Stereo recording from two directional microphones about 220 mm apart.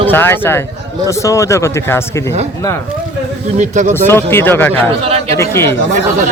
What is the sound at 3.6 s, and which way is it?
Speech, 35° right (ahead or behind).